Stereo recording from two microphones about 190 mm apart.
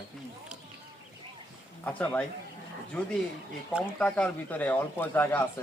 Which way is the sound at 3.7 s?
5° right (ahead or behind).